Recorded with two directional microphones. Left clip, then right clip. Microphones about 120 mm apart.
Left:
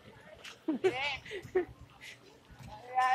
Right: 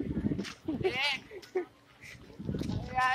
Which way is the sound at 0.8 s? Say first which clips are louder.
Right 2 dB; 5° right (ahead or behind).